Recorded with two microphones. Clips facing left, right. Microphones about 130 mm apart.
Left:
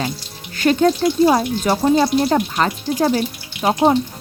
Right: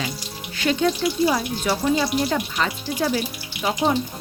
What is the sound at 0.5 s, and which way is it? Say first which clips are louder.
Speech: left 6 dB; 45° left (ahead or behind).